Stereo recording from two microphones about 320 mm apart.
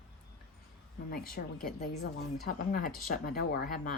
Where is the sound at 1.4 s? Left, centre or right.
Left.